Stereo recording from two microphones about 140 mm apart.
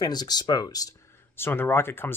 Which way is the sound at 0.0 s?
30° left (ahead or behind).